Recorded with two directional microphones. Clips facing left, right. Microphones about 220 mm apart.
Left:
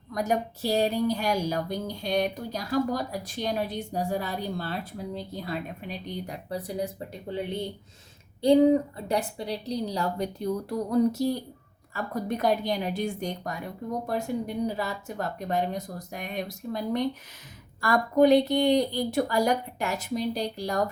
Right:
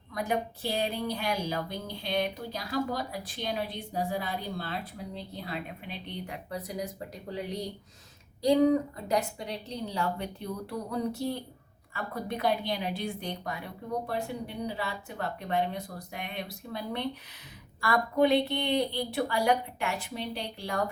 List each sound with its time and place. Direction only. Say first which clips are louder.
0.1 s a woman's voice: left 3 dB; 40° left (ahead or behind)